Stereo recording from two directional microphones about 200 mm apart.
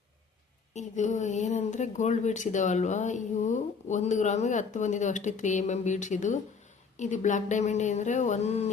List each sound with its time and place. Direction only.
0.7 s a woman's voice: 35° left (ahead or behind)